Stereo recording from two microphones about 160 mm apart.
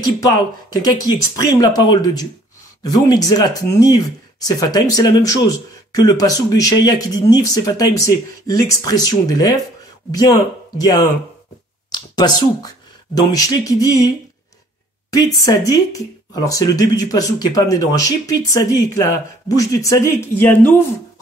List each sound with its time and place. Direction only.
0.0 s speech: 25° left (ahead or behind)
15.0 s speech: 20° left (ahead or behind)